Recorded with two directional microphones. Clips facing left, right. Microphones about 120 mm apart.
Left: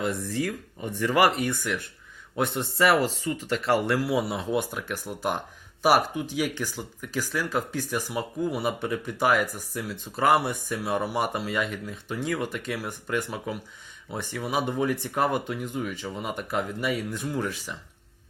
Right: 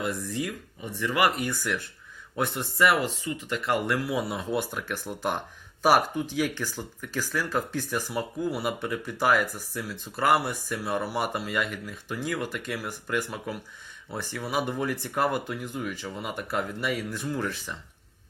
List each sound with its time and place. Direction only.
0.0 s speech: 25° left (ahead or behind)
0.8 s speech: 45° left (ahead or behind); by 17.6 s 20° left (ahead or behind)